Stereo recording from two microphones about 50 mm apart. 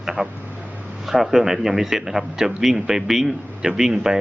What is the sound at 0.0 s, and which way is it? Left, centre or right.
A man's voice, centre.